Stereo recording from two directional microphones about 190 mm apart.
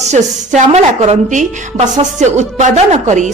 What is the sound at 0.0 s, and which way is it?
A woman's voice, 35° right (ahead or behind).